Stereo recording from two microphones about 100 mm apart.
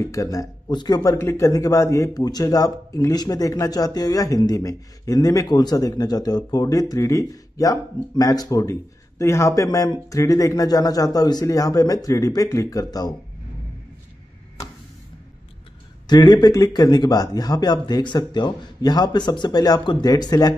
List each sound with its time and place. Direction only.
0.1 s speech: 35° left (ahead or behind)
0.7 s speech: 45° left (ahead or behind)
1.2 s speech: 30° left (ahead or behind)
16.1 s speech: 45° left (ahead or behind)